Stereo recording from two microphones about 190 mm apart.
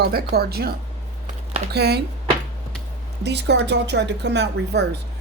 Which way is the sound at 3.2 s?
60° right (ahead or behind).